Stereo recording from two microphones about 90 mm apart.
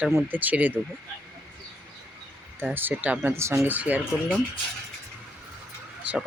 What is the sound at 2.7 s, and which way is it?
Speech, 20° right (ahead or behind).